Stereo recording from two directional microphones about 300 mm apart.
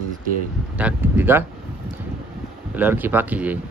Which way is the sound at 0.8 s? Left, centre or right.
Centre.